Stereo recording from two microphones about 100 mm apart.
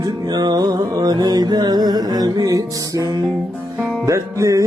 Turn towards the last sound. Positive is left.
turn(degrees=-35)  # may be behind; listen again after turning